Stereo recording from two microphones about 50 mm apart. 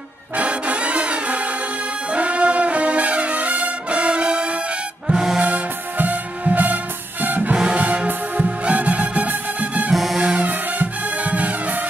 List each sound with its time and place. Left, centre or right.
0.4 s music: right
2.1 s brass instrument: right
5.0 s music: centre
5.4 s music: right
9.9 s music: centre
10.2 s music: right